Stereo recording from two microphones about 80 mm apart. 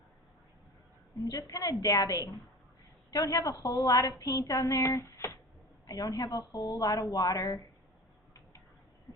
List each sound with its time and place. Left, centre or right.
1.2 s a woman's voice: left
5.8 s a woman's voice: left